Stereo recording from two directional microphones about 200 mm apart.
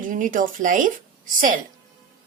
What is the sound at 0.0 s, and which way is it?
A woman's voice, 40° right (ahead or behind).